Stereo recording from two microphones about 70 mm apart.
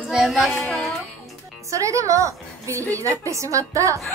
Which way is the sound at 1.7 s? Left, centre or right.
Right.